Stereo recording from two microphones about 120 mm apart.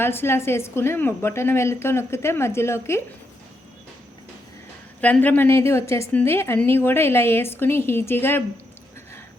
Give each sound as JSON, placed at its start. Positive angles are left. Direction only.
{"t": 0.0, "sound": "a woman's voice", "side_deg": 20}
{"t": 4.9, "sound": "a woman's voice", "side_deg": 10}